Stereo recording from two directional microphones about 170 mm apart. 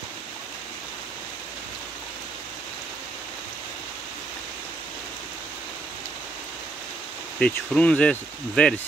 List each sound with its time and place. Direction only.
7.3 s speech: 5° left (ahead or behind)